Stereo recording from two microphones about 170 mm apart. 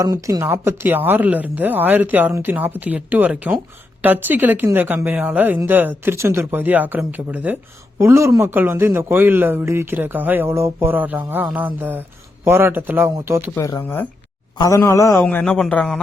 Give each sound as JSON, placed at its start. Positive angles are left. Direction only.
{"t": 0.0, "sound": "speech", "side_deg": -20}
{"t": 13.6, "sound": "speech", "side_deg": 20}
{"t": 13.8, "sound": "a man's voice", "side_deg": 10}